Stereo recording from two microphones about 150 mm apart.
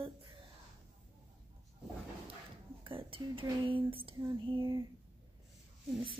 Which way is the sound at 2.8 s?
35° right (ahead or behind).